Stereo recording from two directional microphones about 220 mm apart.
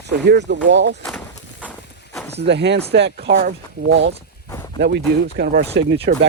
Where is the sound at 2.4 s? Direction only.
50° right (ahead or behind).